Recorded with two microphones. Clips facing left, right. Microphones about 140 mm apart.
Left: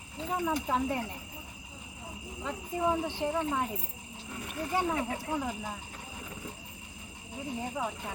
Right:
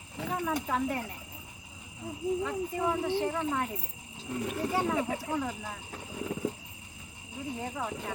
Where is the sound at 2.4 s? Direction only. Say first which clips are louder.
Even; 15° left (ahead or behind).